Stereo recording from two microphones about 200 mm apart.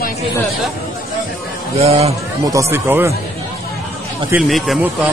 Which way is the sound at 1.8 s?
30° right (ahead or behind).